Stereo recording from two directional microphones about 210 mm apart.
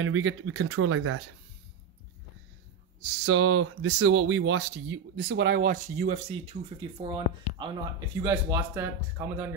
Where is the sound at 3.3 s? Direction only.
70° right (ahead or behind).